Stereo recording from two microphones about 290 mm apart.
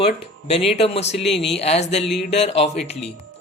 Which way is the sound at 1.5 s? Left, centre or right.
Left.